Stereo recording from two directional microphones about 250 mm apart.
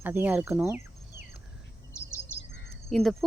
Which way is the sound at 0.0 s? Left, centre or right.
Centre.